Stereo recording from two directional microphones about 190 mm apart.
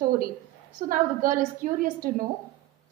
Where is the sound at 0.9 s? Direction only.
45° right (ahead or behind).